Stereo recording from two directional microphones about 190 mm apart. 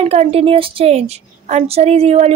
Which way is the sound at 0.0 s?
30° right (ahead or behind).